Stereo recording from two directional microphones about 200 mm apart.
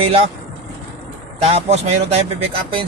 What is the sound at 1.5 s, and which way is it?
Speech, 30° right (ahead or behind).